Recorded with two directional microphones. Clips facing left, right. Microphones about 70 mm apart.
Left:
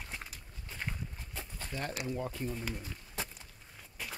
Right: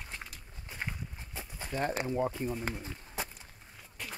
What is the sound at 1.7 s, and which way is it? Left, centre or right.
Speech, right.